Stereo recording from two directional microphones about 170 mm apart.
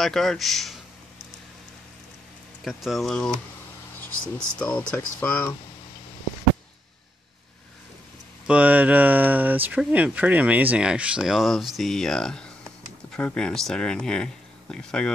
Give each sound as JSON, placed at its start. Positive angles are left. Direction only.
{"t": 0.0, "sound": "speech", "side_deg": 0}
{"t": 2.6, "sound": "speech", "side_deg": 0}
{"t": 4.6, "sound": "speech", "side_deg": 5}
{"t": 8.5, "sound": "speech", "side_deg": -10}